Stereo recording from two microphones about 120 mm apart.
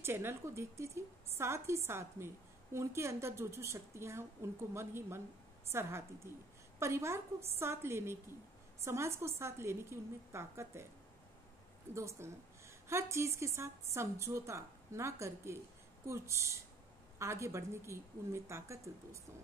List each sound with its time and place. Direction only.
0.0 s a woman's voice: 20° right (ahead or behind)
11.9 s a woman's voice: 25° right (ahead or behind)